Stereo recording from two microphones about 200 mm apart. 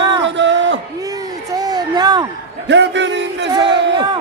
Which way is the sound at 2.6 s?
60° right (ahead or behind).